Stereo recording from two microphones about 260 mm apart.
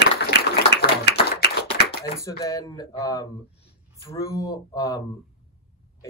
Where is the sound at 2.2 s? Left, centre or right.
Centre.